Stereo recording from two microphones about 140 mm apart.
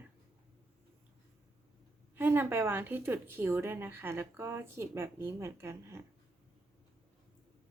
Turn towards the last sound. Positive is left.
turn(degrees=-20)  # may be behind; listen again after turning